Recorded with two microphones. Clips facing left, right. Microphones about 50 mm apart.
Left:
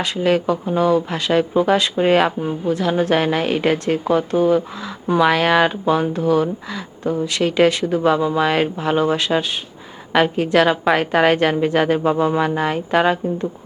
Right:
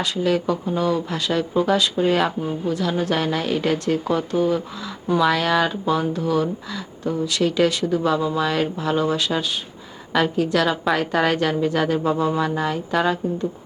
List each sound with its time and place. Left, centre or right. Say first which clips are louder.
0.0 s a woman's voice: left 3 dB; left
2.2 s a woman's voice: left 3 dB; left